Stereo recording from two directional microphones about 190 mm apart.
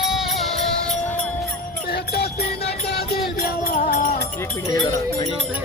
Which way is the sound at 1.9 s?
55° left (ahead or behind).